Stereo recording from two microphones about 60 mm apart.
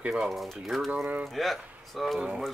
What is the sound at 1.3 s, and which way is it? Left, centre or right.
Speech, centre.